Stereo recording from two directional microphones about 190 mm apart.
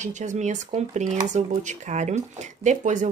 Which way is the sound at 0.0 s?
40° right (ahead or behind).